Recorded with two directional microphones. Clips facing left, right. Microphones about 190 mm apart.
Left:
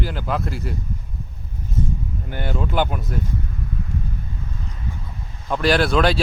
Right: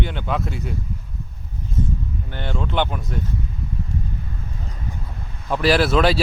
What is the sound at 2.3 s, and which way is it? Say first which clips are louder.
Speech: left 2 dB; 5° left (ahead or behind).